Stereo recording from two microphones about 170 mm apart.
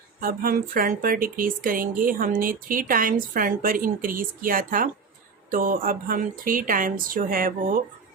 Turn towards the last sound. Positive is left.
turn(degrees=-55)  # may be behind; listen again after turning